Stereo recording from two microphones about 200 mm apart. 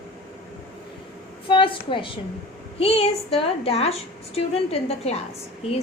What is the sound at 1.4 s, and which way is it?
A woman's voice, 25° left (ahead or behind).